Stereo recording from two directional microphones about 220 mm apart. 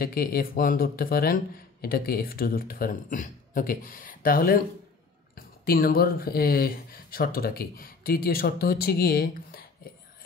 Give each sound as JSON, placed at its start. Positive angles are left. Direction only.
{"t": 0.0, "sound": "speech", "side_deg": 45}